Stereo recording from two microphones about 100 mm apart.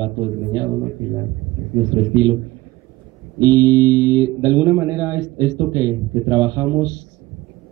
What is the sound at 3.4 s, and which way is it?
Speech, 35° right (ahead or behind).